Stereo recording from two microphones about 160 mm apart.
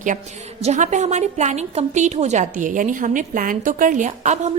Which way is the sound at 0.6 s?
45° right (ahead or behind).